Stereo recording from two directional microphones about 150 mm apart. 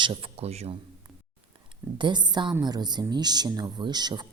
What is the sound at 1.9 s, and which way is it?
Speech, 30° right (ahead or behind).